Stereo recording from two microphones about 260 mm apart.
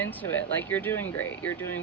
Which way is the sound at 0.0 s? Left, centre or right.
Centre.